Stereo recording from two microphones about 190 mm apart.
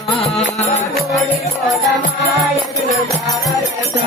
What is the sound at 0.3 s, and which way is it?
Music, 35° left (ahead or behind).